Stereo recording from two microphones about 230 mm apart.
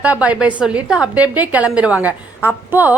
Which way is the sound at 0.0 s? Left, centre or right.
Centre.